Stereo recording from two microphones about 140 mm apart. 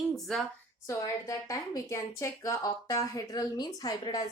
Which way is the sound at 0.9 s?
25° left (ahead or behind).